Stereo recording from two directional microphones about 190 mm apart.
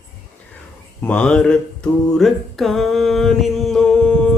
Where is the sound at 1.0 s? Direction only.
5° left (ahead or behind).